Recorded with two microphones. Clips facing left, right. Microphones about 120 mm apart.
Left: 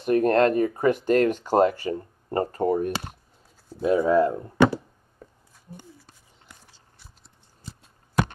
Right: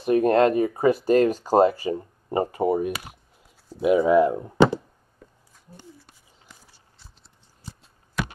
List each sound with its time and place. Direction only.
0.0 s speech: 20° right (ahead or behind)
6.0 s horse: 5° right (ahead or behind)